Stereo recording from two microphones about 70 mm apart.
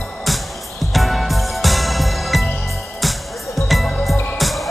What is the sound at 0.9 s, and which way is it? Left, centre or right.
Music, centre.